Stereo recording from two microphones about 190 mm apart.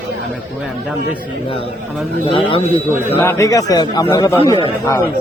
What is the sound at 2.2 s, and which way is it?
Speech, 30° left (ahead or behind).